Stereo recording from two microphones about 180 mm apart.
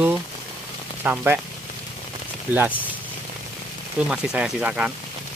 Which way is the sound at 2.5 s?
10° right (ahead or behind).